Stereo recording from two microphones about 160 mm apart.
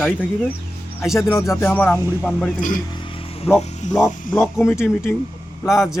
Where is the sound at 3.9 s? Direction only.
5° right (ahead or behind).